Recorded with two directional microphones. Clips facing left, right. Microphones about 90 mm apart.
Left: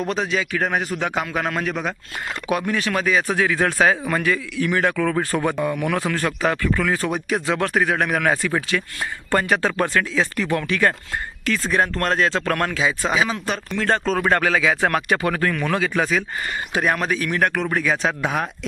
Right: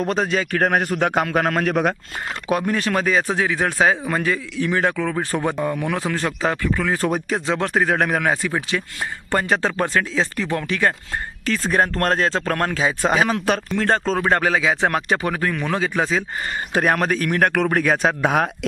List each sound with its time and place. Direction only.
0.1 s a man's voice: 45° right (ahead or behind)
2.5 s speech: 40° right (ahead or behind)
3.2 s a man's voice: 20° right (ahead or behind)
6.9 s speech: 40° right (ahead or behind)
7.4 s speech: 25° right (ahead or behind)
8.2 s a man's voice: 20° right (ahead or behind)
11.7 s speech: 40° right (ahead or behind)
13.1 s a man's voice: 50° right (ahead or behind)
13.7 s a man's voice: 35° right (ahead or behind)
16.7 s a man's voice: 45° right (ahead or behind)